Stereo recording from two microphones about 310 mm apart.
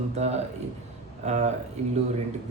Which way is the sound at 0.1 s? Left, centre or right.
Right.